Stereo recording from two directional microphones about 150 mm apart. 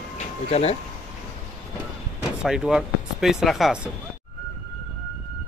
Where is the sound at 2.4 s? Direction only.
5° right (ahead or behind).